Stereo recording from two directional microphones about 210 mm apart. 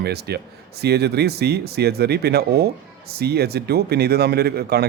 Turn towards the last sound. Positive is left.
turn(degrees=-50)  # may be behind; listen again after turning